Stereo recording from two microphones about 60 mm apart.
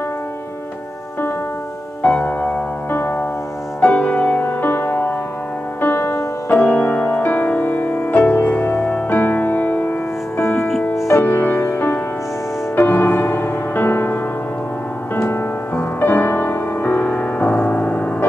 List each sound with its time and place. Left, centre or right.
2.0 s music: left
2.9 s music: left
3.8 s music: left
15.7 s music: left